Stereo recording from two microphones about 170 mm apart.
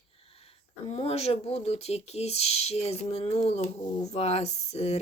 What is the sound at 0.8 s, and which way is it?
Speech, 35° left (ahead or behind).